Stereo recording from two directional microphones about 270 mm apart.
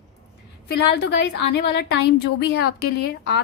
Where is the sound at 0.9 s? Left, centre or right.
Left.